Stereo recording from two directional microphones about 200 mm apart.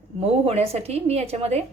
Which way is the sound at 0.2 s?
30° right (ahead or behind).